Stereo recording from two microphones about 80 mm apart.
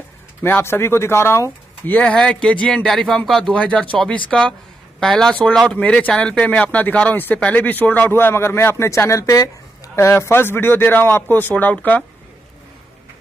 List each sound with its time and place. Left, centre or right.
0.4 s speech: left
2.1 s speech: centre